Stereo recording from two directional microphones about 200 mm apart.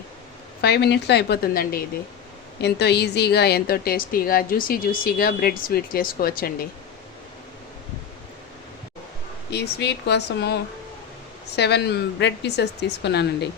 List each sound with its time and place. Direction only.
0.6 s a woman's voice: 55° left (ahead or behind)
9.5 s a woman's voice: 55° left (ahead or behind)